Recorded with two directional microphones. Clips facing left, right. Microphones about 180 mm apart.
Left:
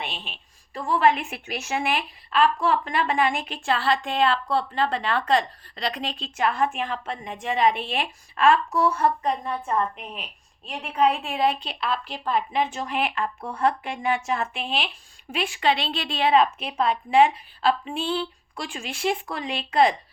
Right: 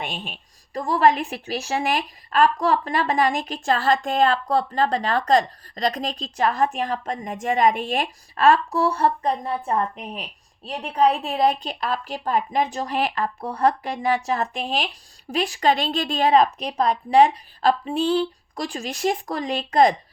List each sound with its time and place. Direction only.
0.0 s a woman's voice: 45° right (ahead or behind)